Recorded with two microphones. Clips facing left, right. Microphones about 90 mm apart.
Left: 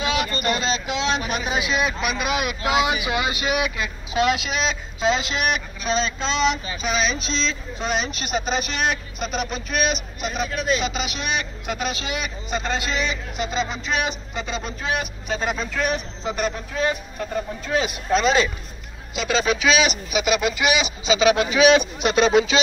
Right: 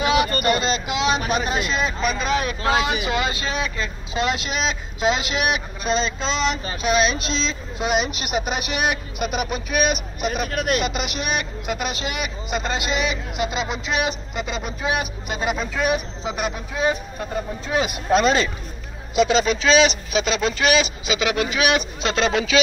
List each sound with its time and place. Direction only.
0.0 s a sound: 50° right (ahead or behind)
0.6 s a man's voice: 5° right (ahead or behind)
10.5 s speech: 60° right (ahead or behind)
10.9 s speech: 5° right (ahead or behind)
18.2 s speech: 5° left (ahead or behind)
19.6 s a man's voice: 5° left (ahead or behind); by 22.6 s 20° left (ahead or behind)